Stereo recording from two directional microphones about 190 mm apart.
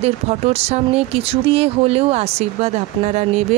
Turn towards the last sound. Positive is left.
turn(degrees=-35)  # may be behind; listen again after turning